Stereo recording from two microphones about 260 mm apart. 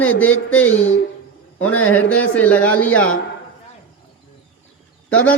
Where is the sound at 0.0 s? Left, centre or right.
Centre.